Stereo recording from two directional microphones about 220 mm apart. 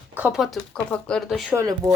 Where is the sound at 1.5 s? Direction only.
15° right (ahead or behind).